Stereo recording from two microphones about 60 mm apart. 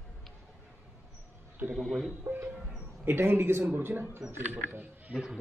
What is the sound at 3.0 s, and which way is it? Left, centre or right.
A man's voice, right.